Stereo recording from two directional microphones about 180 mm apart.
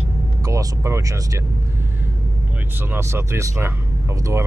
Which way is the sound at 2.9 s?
15° right (ahead or behind).